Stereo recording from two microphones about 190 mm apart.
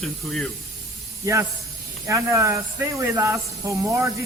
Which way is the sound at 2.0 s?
15° right (ahead or behind).